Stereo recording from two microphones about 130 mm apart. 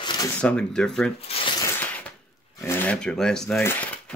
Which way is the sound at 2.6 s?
15° left (ahead or behind).